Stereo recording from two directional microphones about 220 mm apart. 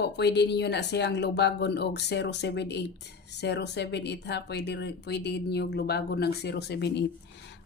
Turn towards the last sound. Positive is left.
turn(degrees=50)  # may be behind; listen again after turning